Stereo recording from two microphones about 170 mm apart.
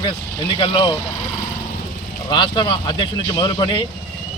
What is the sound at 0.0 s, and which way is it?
Speech, 30° left (ahead or behind).